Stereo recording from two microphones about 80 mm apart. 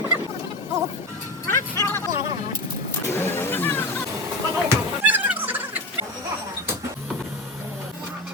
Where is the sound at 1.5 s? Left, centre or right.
Left.